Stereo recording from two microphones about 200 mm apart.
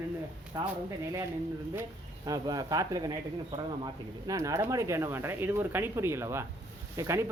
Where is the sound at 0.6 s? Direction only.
20° right (ahead or behind).